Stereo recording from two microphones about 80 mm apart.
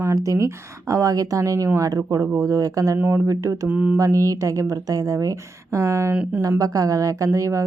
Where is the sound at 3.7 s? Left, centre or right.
Centre.